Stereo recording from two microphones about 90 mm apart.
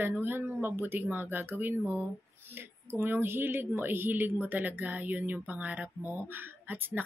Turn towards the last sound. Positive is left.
turn(degrees=-20)  # may be behind; listen again after turning